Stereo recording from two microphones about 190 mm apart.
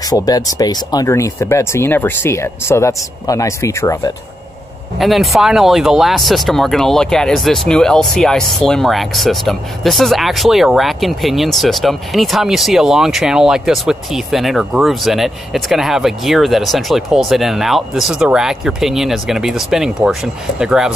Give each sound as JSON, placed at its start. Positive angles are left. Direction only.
{"t": 0.0, "sound": "speech", "side_deg": 20}
{"t": 4.9, "sound": "speech", "side_deg": 0}